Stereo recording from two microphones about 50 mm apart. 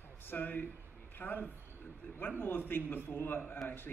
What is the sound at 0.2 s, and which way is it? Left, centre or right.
A man's voice, left.